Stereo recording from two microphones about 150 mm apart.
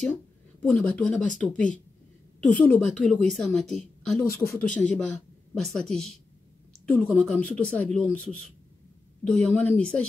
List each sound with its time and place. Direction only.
0.0 s a woman's voice: 5° left (ahead or behind)
4.2 s speech: 20° left (ahead or behind)
4.6 s a woman's voice: 10° left (ahead or behind)